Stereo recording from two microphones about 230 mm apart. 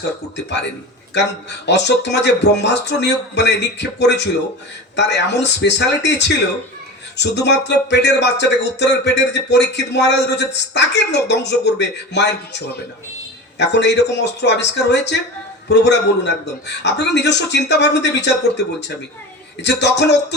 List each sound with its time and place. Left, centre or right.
1.1 s speech: left